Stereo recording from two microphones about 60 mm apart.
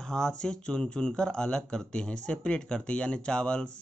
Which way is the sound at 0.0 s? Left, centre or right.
Centre.